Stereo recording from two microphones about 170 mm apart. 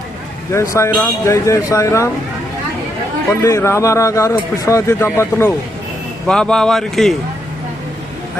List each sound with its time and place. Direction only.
0.5 s speech: 15° left (ahead or behind)
3.4 s a man's voice: 15° left (ahead or behind)